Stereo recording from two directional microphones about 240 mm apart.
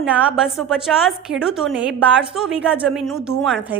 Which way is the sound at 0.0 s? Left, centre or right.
Centre.